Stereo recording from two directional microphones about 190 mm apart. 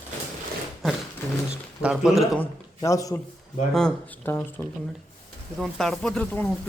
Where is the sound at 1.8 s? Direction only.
5° right (ahead or behind).